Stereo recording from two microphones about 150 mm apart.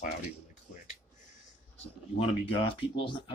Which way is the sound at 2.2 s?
35° left (ahead or behind).